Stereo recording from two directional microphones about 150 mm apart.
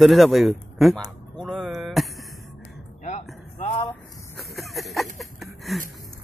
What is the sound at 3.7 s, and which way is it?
Vehicle, 30° left (ahead or behind).